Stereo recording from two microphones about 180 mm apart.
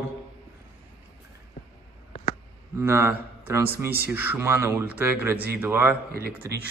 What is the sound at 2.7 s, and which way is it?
Speech, 15° right (ahead or behind).